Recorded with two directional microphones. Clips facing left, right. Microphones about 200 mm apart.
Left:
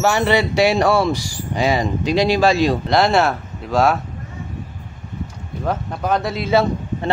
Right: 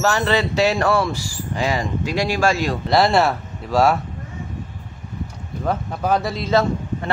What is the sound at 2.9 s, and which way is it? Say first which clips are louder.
Speech: right 4 dB; centre (ahead or behind).